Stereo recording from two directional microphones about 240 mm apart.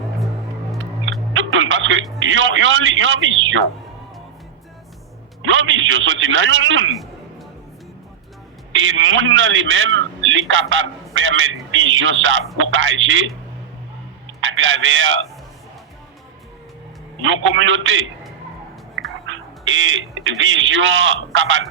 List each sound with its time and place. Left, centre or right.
1.3 s music: right
2.1 s a man's voice: right
5.4 s a man's voice: right
8.7 s a man's voice: right
14.4 s a man's voice: right
17.2 s a man's voice: right
19.2 s speech: right